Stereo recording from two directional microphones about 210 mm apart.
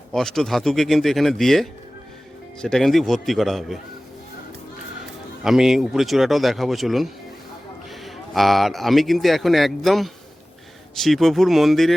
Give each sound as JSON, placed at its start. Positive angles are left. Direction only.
{"t": 0.1, "sound": "speech", "side_deg": 0}
{"t": 5.4, "sound": "speech", "side_deg": 0}